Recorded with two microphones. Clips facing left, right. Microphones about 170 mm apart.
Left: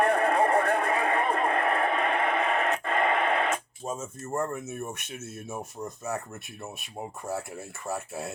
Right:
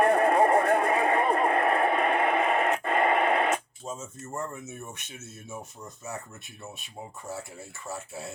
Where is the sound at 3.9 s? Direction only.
55° left (ahead or behind).